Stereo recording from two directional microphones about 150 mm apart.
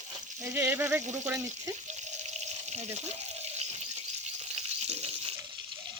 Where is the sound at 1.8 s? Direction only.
50° right (ahead or behind).